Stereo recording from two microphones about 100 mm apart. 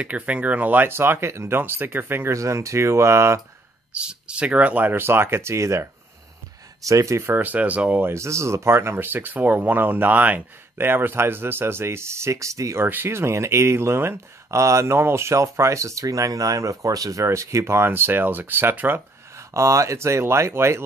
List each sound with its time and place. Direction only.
0.0 s speech: 15° right (ahead or behind)
3.9 s speech: 10° right (ahead or behind); by 5.9 s 30° right (ahead or behind)
6.9 s speech: 30° right (ahead or behind); by 8.1 s 15° right (ahead or behind)
8.1 s speech: 30° right (ahead or behind)